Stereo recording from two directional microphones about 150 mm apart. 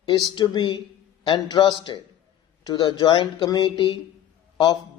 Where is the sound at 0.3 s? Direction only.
30° left (ahead or behind).